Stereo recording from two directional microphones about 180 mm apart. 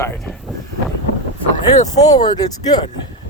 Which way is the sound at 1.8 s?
20° left (ahead or behind).